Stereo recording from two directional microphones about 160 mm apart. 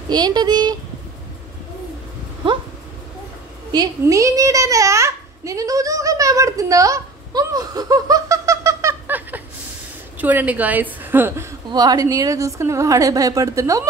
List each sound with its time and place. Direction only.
0.1 s a woman's voice: 25° right (ahead or behind)
3.7 s a child's voice: 25° right (ahead or behind)
11.7 s a woman's voice: 25° right (ahead or behind)